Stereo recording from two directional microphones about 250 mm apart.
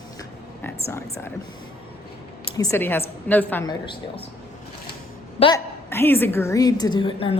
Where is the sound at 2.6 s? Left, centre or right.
Centre.